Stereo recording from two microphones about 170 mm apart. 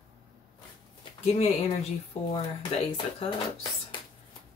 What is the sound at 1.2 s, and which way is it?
Speech, 40° left (ahead or behind).